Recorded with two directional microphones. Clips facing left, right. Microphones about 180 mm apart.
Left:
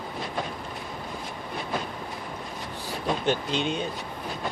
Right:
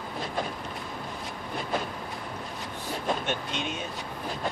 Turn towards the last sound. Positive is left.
turn(degrees=30)  # may be behind; listen again after turning